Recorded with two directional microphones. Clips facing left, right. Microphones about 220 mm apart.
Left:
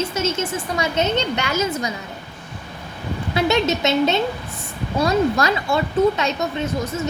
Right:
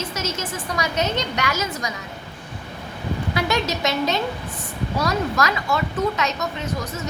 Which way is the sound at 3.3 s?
25° left (ahead or behind).